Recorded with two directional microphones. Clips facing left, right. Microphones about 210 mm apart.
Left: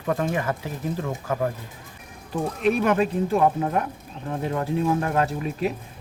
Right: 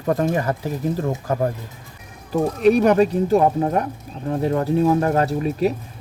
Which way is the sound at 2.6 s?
40° right (ahead or behind).